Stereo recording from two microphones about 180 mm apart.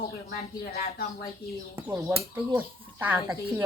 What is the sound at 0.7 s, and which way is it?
Speech, 60° left (ahead or behind).